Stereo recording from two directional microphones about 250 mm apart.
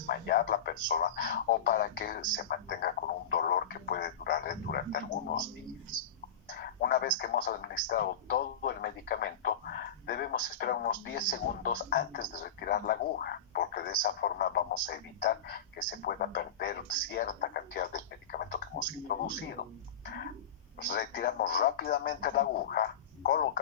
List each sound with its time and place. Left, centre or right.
0.1 s a man's voice: left
6.5 s speech: left
20.9 s a man's voice: left